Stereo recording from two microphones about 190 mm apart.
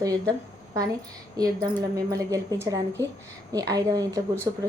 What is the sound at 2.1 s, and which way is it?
A woman's voice, 20° right (ahead or behind).